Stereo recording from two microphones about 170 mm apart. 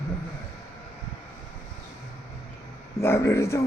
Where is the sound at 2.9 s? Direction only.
15° left (ahead or behind).